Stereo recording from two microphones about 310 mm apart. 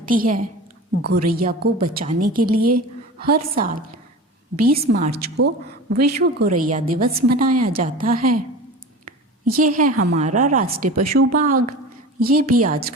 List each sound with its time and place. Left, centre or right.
0.0 s a woman's voice: right
9.6 s a woman's voice: right
11.0 s speech: right
11.3 s a woman's voice: right